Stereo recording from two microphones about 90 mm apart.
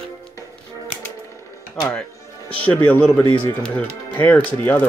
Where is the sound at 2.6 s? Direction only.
15° left (ahead or behind).